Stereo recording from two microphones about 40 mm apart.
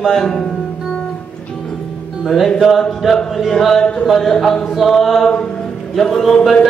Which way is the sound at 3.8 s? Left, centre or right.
Left.